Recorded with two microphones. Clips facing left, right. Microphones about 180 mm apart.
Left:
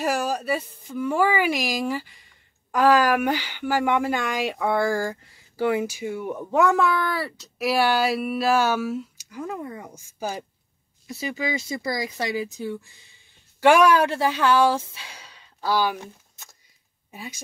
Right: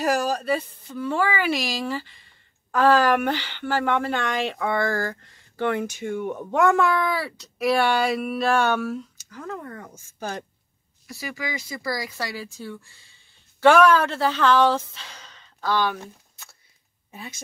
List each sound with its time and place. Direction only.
0.0 s speech: 5° left (ahead or behind)
11.1 s a woman's voice: 25° left (ahead or behind)